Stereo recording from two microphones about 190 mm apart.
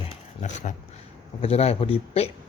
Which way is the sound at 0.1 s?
40° left (ahead or behind).